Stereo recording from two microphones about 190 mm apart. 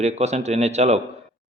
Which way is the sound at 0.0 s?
35° right (ahead or behind).